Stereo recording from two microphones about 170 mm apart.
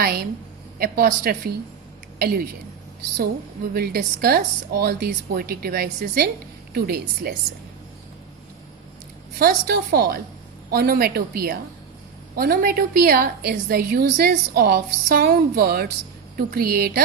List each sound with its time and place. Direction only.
0.0 s a woman's voice: 65° right (ahead or behind)
3.8 s a woman's voice: 60° right (ahead or behind)
9.4 s a woman's voice: 65° right (ahead or behind)